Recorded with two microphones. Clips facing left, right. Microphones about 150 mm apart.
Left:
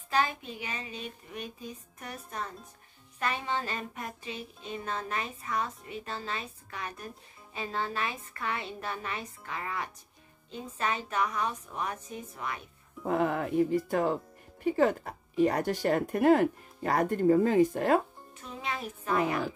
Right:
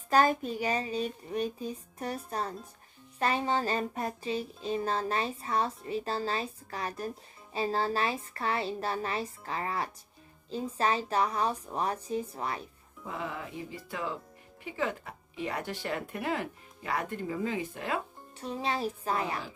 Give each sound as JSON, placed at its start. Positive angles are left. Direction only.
{"t": 0.1, "sound": "speech", "side_deg": -45}
{"t": 13.0, "sound": "speech", "side_deg": 55}
{"t": 18.4, "sound": "speech", "side_deg": -35}